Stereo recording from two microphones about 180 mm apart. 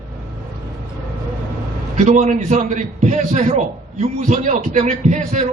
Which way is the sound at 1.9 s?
40° right (ahead or behind).